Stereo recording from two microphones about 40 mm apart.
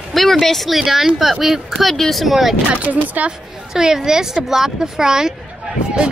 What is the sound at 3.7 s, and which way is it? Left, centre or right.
Speech, centre.